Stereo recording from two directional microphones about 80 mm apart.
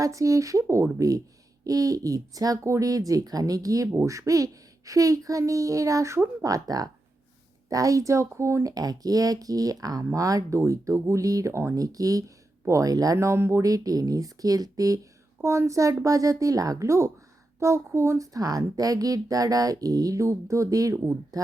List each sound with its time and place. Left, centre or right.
0.0 s a child's voice: right
3.9 s a child's voice: right
8.7 s a child's voice: right
13.1 s speech: right
13.6 s a child's voice: right
15.4 s a child's voice: right
18.3 s a child's voice: right
20.9 s speech: right